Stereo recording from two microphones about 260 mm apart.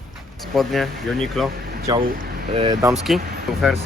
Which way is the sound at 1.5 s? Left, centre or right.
Right.